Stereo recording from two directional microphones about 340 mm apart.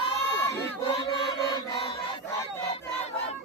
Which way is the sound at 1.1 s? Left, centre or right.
Centre.